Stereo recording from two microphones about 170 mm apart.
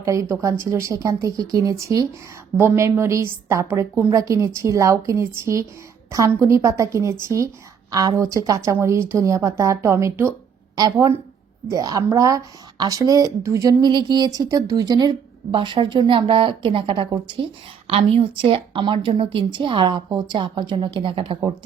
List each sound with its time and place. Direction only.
0.0 s a woman's voice: 15° right (ahead or behind)
11.7 s a woman's voice: 20° right (ahead or behind)